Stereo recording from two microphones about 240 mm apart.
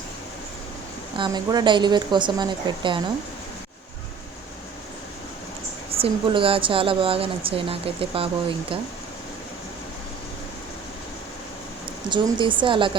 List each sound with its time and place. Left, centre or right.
1.1 s speech: centre
6.0 s speech: right
12.1 s speech: centre